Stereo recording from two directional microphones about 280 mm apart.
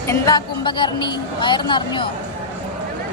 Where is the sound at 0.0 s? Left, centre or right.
Centre.